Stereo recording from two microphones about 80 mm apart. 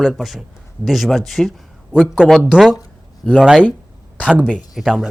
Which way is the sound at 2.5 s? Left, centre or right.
Centre.